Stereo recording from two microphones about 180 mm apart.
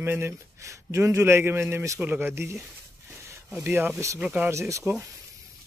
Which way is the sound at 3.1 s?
15° right (ahead or behind).